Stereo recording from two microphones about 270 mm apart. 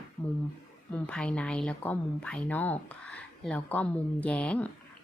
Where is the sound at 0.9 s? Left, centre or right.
Centre.